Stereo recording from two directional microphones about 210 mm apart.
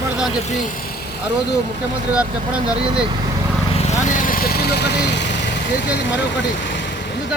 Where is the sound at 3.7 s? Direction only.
30° left (ahead or behind); by 5.3 s 55° left (ahead or behind).